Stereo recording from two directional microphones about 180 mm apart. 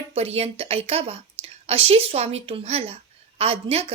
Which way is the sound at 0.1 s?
35° right (ahead or behind).